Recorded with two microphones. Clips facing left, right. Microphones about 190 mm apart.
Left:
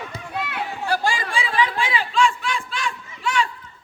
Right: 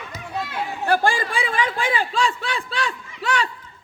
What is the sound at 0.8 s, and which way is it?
A man's voice, 55° right (ahead or behind).